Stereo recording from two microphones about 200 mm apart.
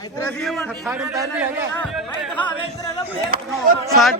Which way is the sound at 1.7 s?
5° left (ahead or behind).